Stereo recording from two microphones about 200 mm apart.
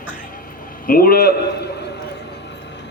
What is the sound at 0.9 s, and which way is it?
Speech, 45° left (ahead or behind).